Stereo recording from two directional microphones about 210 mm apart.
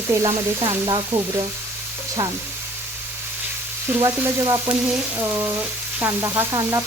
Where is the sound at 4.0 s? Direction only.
20° right (ahead or behind).